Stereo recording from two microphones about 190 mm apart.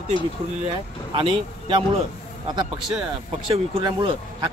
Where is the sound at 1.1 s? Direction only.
25° right (ahead or behind).